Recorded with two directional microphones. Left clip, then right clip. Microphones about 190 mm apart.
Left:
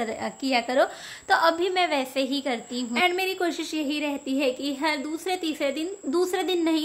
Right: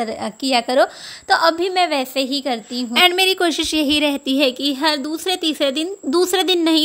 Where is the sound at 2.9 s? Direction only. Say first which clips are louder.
Right 10 dB; 50° right (ahead or behind).